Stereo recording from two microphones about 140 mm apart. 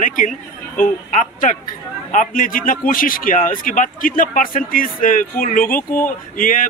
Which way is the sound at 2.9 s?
90° left.